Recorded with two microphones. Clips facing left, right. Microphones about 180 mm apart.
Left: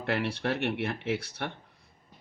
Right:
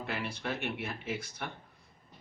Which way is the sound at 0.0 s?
70° left (ahead or behind).